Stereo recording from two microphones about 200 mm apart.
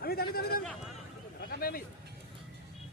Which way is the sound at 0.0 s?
50° left (ahead or behind).